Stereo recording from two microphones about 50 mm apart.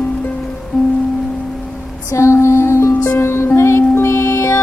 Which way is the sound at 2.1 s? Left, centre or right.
Left.